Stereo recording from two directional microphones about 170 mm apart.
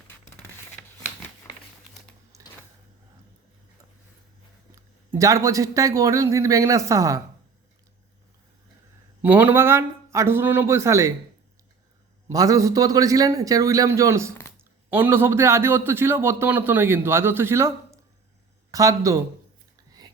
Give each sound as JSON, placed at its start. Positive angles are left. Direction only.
{"t": 2.3, "sound": "a sound", "side_deg": -20}
{"t": 4.7, "sound": "speech", "side_deg": -20}
{"t": 9.2, "sound": "a man's voice", "side_deg": -10}
{"t": 12.3, "sound": "a man's voice", "side_deg": -20}